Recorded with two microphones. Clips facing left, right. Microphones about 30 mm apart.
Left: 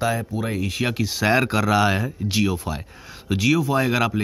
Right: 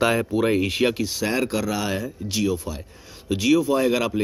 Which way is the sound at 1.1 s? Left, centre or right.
Left.